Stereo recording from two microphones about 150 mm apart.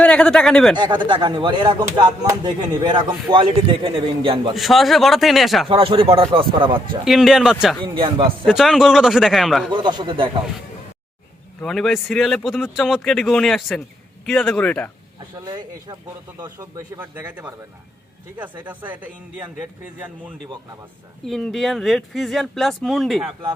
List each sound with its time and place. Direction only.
0.0 s speech: 5° left (ahead or behind)
0.8 s speech: 30° right (ahead or behind)
4.5 s speech: centre (ahead or behind)
5.6 s speech: 35° right (ahead or behind)
7.0 s speech: centre (ahead or behind)
7.9 s speech: 35° right (ahead or behind)
8.4 s speech: centre (ahead or behind)
9.7 s speech: 30° right (ahead or behind)
11.6 s speech: 5° left (ahead or behind)
15.4 s speech: 30° right (ahead or behind)
17.0 s speech: 10° right (ahead or behind)
18.6 s speech: 10° right (ahead or behind)
21.2 s speech: centre (ahead or behind)